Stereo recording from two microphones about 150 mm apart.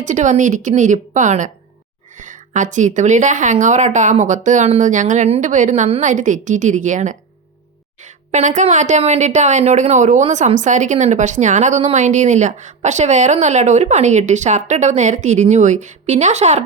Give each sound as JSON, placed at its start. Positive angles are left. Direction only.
{"t": 0.0, "sound": "speech", "side_deg": -55}